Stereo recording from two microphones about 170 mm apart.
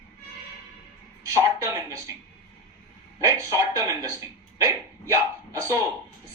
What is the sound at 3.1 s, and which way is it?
Speech, 20° right (ahead or behind).